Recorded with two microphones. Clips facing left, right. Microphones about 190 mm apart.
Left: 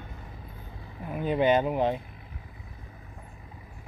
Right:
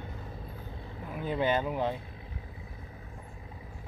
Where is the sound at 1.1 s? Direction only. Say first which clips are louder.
Left 6 dB; 20° left (ahead or behind).